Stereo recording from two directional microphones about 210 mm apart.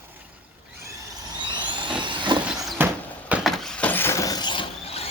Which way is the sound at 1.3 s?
20° right (ahead or behind).